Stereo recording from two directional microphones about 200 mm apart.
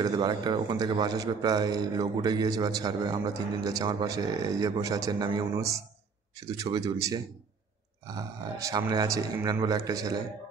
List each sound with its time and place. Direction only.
0.0 s a man's voice: 20° right (ahead or behind)